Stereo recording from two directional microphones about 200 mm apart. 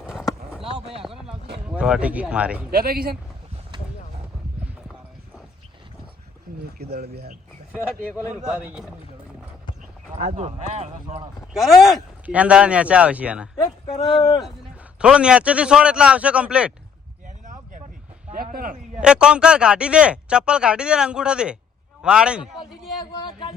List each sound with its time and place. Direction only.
0.0 s a sound: 5° right (ahead or behind)
1.6 s speech: 5° right (ahead or behind)
2.7 s speech: 50° right (ahead or behind)
6.7 s speech: 50° right (ahead or behind)
8.4 s speech: 5° right (ahead or behind)
10.2 s speech: 35° right (ahead or behind)
11.0 s speech: 25° right (ahead or behind)
11.5 s speech: centre (ahead or behind)
13.9 s speech: 25° left (ahead or behind)
14.9 s speech: 5° right (ahead or behind)
17.2 s a sound: 40° right (ahead or behind)
18.9 s a man's voice: 5° right (ahead or behind)